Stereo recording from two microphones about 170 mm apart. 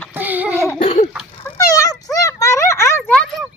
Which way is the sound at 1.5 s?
20° left (ahead or behind).